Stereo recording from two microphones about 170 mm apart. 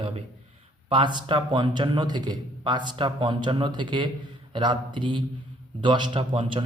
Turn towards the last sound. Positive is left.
turn(degrees=-30)  # may be behind; listen again after turning